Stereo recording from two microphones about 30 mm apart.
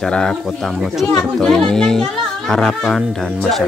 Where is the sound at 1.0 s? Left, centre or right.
Left.